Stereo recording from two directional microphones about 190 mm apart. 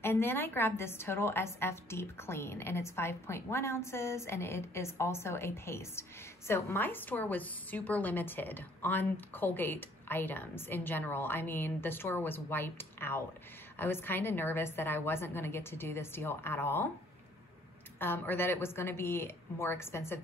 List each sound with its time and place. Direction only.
0.0 s a woman's voice: 10° left (ahead or behind)
17.9 s a woman's voice: 10° left (ahead or behind)